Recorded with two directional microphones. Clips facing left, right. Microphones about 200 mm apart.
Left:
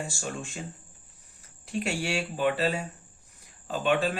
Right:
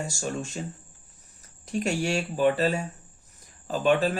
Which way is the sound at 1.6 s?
40° right (ahead or behind).